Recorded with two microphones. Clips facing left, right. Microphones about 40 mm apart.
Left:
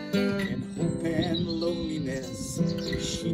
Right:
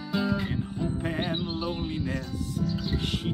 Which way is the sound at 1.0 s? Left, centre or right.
Right.